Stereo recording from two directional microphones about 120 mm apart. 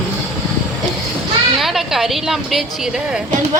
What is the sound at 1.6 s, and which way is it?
Speech, centre (ahead or behind).